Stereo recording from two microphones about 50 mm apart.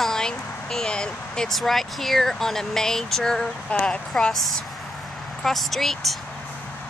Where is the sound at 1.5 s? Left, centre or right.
Centre.